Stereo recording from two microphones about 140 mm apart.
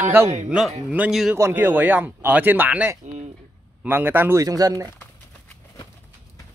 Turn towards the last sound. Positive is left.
turn(degrees=-25)  # may be behind; listen again after turning